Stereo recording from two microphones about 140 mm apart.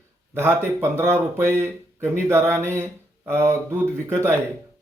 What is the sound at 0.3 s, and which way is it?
Speech, 15° right (ahead or behind).